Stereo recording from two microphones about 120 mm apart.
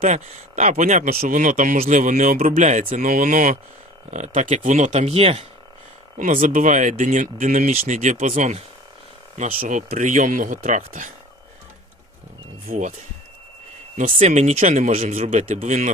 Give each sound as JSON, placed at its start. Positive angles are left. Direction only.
{"t": 0.0, "sound": "speech", "side_deg": -75}
{"t": 6.1, "sound": "speech", "side_deg": -90}
{"t": 9.6, "sound": "speech", "side_deg": -90}
{"t": 13.9, "sound": "speech", "side_deg": -70}
{"t": 15.6, "sound": "speech", "side_deg": -90}